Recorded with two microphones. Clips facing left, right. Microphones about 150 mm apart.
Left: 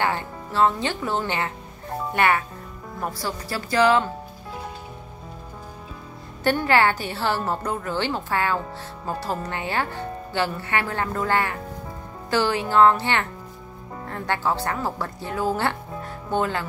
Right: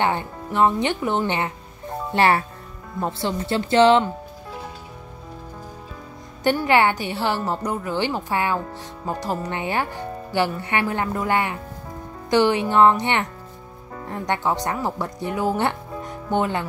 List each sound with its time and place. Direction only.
0.0 s speech: 20° right (ahead or behind)
2.1 s speech: 30° right (ahead or behind)
6.4 s speech: 15° right (ahead or behind)